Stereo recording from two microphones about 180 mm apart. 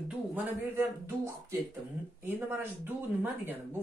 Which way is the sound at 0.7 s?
15° right (ahead or behind).